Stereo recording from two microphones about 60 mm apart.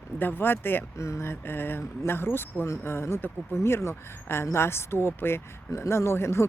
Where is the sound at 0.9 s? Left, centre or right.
Left.